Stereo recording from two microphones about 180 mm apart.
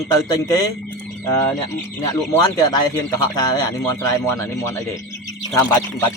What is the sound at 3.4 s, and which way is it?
Speech, 20° left (ahead or behind).